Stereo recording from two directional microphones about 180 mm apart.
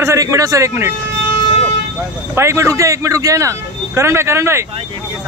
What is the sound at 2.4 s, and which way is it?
Speech, 15° right (ahead or behind).